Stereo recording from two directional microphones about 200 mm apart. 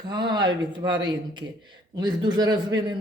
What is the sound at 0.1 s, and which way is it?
Speech, 20° right (ahead or behind).